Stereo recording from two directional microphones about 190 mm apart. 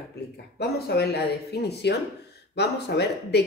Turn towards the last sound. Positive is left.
turn(degrees=60)  # may be behind; listen again after turning